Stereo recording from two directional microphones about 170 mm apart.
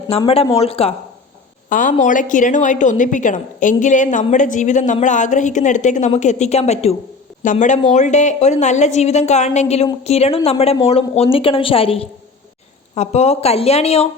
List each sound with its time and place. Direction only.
0.1 s a woman's voice: 35° left (ahead or behind)
1.7 s a woman's voice: 50° left (ahead or behind)